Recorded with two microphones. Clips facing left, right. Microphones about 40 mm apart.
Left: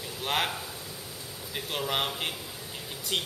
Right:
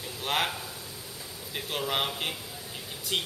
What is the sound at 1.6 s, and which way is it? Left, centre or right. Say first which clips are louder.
A man's voice: even; centre.